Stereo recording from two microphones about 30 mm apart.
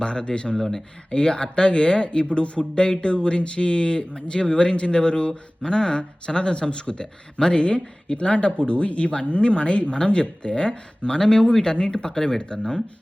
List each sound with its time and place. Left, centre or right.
0.0 s speech: left